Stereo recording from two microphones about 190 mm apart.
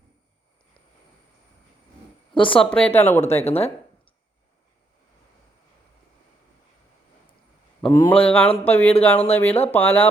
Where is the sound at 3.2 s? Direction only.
35° left (ahead or behind).